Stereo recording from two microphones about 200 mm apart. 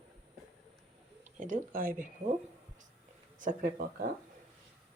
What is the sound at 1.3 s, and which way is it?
Speech, 40° right (ahead or behind).